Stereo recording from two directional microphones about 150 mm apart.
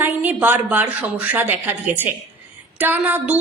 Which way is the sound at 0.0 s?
10° right (ahead or behind).